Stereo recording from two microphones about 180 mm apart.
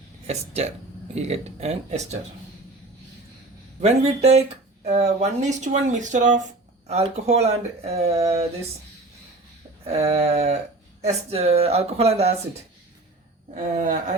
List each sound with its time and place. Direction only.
0.3 s speech: 35° right (ahead or behind)
3.8 s speech: 35° right (ahead or behind)
9.8 s speech: 35° right (ahead or behind)
13.6 s a woman's voice: 45° right (ahead or behind)